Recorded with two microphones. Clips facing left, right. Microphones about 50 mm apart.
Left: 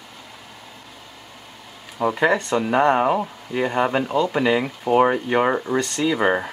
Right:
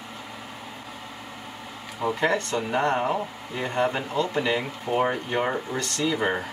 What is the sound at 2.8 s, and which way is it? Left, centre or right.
Speech, left.